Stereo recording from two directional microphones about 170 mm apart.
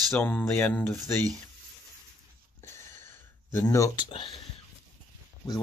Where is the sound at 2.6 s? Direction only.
15° left (ahead or behind).